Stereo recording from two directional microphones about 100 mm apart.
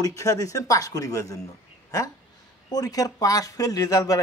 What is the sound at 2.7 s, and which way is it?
Speech, 40° left (ahead or behind).